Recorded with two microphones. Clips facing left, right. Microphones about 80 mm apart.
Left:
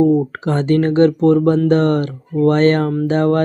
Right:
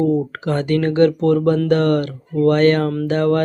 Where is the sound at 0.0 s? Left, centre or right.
Left.